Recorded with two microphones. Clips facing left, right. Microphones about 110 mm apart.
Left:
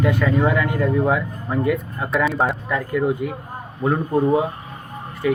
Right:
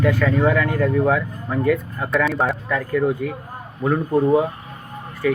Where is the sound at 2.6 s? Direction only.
15° left (ahead or behind).